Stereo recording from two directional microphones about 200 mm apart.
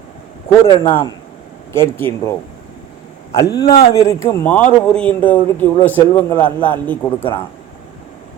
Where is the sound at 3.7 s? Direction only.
15° left (ahead or behind).